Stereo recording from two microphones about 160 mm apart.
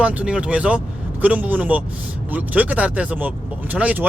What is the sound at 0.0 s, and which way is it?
A man's voice, 10° right (ahead or behind).